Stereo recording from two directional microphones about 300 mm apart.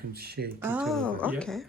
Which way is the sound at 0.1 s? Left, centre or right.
Right.